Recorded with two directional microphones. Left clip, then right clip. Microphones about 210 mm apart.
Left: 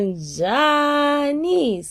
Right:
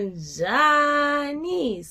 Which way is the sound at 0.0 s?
40° left (ahead or behind).